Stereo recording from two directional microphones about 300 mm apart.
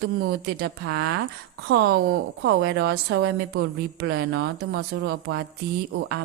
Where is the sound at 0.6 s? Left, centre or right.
Right.